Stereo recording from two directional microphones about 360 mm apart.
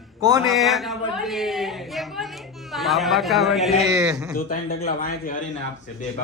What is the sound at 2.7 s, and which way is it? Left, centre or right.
Speech, centre.